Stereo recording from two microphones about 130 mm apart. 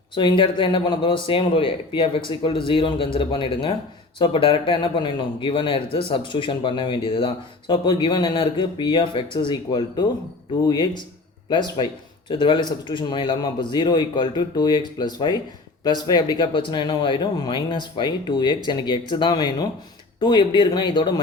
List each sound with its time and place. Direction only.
0.1 s a man's voice: 35° left (ahead or behind)